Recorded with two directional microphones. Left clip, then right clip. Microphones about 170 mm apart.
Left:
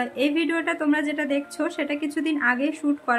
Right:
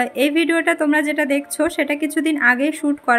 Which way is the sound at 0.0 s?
25° right (ahead or behind).